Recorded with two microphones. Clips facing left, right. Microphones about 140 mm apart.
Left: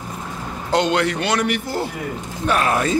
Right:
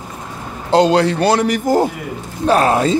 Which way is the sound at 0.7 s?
35° right (ahead or behind).